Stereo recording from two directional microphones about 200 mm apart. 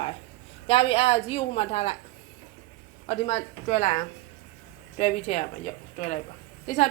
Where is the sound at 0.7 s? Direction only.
30° left (ahead or behind).